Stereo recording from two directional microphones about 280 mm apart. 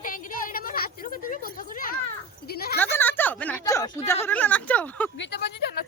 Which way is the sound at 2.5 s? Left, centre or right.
Left.